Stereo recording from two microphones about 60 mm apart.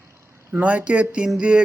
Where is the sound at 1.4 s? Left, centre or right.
Centre.